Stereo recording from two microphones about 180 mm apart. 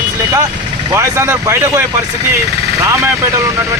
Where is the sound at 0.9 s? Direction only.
15° right (ahead or behind).